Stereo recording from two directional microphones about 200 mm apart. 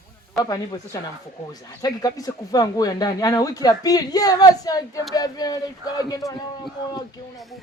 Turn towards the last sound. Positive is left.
turn(degrees=20)  # may be behind; listen again after turning